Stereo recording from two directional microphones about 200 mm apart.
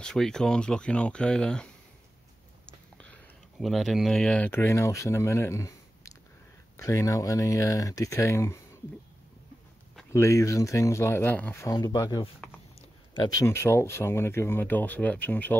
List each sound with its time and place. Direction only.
0.0 s speech: 5° left (ahead or behind)
10.1 s speech: 15° left (ahead or behind)